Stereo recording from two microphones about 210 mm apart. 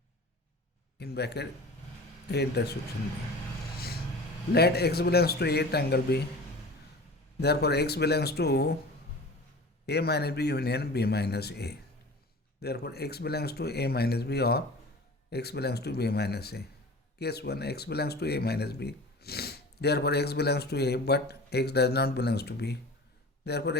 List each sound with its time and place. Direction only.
0.9 s speech: 50° left (ahead or behind)
4.5 s speech: 50° left (ahead or behind)
7.3 s speech: 50° left (ahead or behind)
9.8 s speech: 50° left (ahead or behind)